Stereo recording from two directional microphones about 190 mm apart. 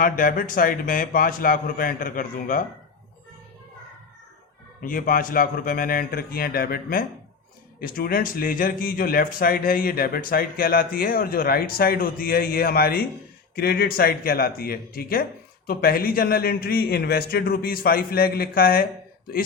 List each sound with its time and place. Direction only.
0.0 s speech: 45° left (ahead or behind)
4.8 s speech: 45° left (ahead or behind)